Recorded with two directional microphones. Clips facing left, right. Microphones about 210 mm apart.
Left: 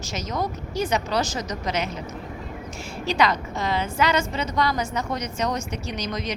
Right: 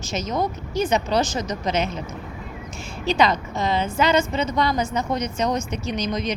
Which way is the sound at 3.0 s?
25° right (ahead or behind).